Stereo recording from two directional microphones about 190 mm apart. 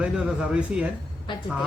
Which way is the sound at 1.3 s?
25° left (ahead or behind).